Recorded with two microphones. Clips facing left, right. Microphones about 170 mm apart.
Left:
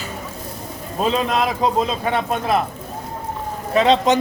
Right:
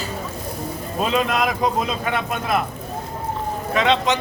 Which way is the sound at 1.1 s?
30° left (ahead or behind).